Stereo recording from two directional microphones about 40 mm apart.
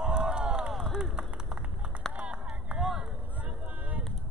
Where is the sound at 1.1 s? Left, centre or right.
Right.